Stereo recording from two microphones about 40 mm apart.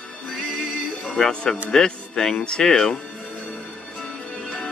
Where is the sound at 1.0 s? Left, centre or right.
Centre.